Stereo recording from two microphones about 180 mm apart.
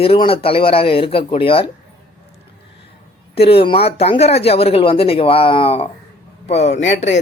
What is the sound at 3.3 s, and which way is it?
Speech, 30° left (ahead or behind).